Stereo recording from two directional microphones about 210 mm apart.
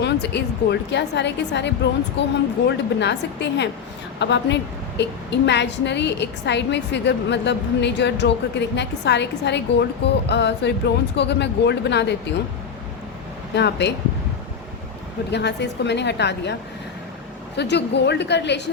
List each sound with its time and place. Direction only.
0.0 s a woman's voice: 55° left (ahead or behind)
13.6 s a woman's voice: 55° left (ahead or behind)
15.3 s a woman's voice: 55° left (ahead or behind)
17.6 s a woman's voice: 55° left (ahead or behind)